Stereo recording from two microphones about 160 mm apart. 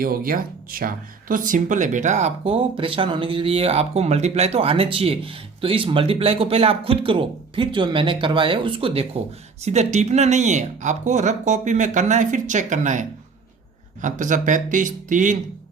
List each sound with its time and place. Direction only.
0.0 s speech: 65° right (ahead or behind)